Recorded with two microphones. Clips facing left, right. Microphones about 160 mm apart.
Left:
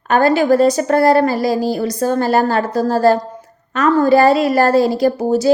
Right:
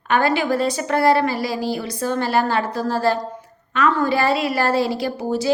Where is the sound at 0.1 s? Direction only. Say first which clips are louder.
Left 6 dB; 40° left (ahead or behind).